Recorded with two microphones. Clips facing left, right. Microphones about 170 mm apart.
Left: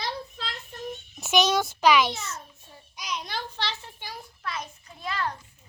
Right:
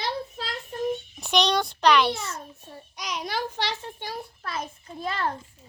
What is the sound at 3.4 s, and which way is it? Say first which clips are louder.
Speech: right 4 dB; 45° right (ahead or behind).